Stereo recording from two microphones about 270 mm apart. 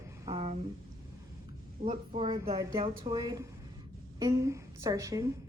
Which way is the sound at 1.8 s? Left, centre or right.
Right.